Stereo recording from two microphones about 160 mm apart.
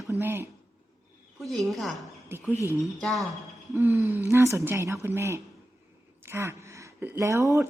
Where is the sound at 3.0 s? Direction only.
Centre (ahead or behind).